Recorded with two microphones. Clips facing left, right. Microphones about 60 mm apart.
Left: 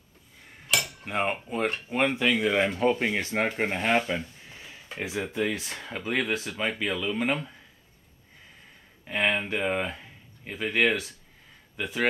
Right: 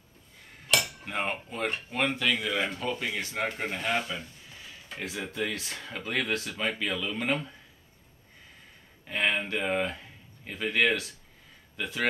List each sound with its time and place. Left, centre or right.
0.7 s cutlery: centre
1.0 s speech: centre
2.2 s speech: left
3.5 s a sound: left
4.9 s speech: centre
9.0 s speech: centre